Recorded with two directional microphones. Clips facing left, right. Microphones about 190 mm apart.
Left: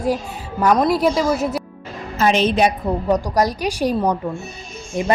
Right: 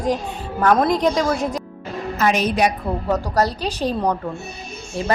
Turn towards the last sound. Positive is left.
turn(degrees=15)  # may be behind; listen again after turning